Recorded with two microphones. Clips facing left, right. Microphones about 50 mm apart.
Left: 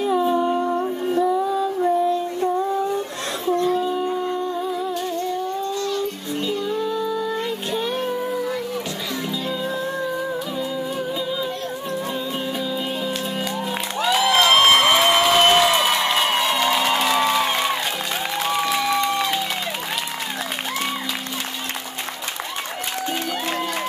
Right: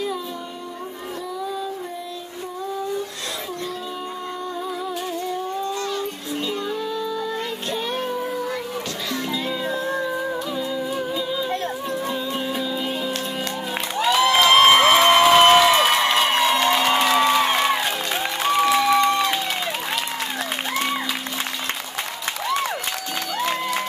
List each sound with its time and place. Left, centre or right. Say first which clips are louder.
0.0 s humming: left 9 dB; left
6.4 s music: left 3 dB; centre
7.7 s child singing: left 1 dB; centre
13.9 s crowd: right 1 dB; centre
18.4 s music: right 4 dB; centre